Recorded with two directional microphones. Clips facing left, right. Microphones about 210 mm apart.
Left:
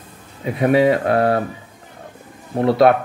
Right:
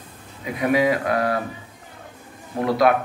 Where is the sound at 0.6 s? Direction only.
30° left (ahead or behind).